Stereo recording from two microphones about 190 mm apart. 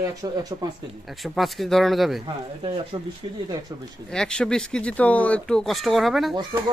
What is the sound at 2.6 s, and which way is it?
Speech, 30° right (ahead or behind).